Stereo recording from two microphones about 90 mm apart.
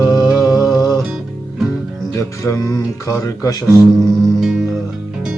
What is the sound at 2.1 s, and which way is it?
Speech, 35° left (ahead or behind).